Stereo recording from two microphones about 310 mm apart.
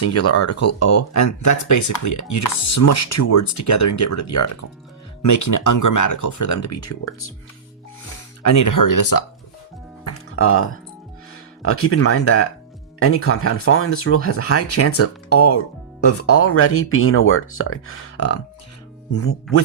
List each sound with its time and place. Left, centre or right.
0.0 s speech: left
8.4 s speech: left
10.0 s music: left
11.6 s speech: left